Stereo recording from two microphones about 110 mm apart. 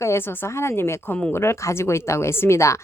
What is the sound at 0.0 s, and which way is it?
Speech, 20° left (ahead or behind).